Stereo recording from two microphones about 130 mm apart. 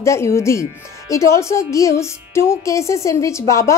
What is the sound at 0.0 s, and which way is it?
A woman's voice, 20° left (ahead or behind).